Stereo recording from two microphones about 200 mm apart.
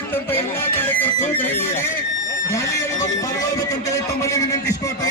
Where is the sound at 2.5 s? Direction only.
15° left (ahead or behind).